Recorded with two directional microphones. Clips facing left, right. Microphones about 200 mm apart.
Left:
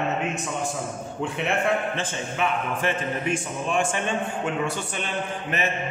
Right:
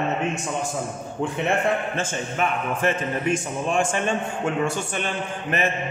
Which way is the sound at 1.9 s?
45° right (ahead or behind).